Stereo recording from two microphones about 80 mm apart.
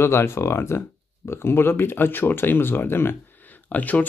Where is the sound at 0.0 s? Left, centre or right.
Left.